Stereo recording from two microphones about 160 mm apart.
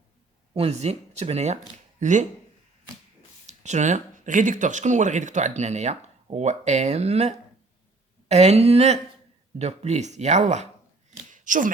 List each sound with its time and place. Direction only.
0.5 s speech: 40° right (ahead or behind)
3.4 s speech: 45° right (ahead or behind)
11.3 s a sound: 55° right (ahead or behind)